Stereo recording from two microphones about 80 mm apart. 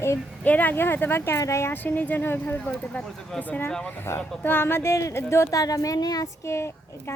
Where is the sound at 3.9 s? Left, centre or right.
Left.